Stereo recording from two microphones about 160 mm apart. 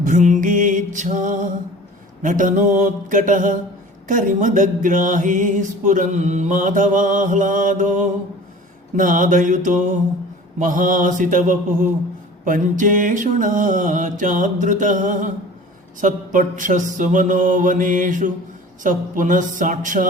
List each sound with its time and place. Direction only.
0.0 s music: 50° right (ahead or behind)
9.0 s mantra: 55° right (ahead or behind)
12.5 s music: 55° right (ahead or behind)
18.8 s mantra: 55° right (ahead or behind)